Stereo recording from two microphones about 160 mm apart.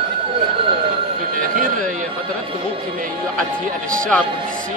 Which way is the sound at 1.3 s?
55° right (ahead or behind).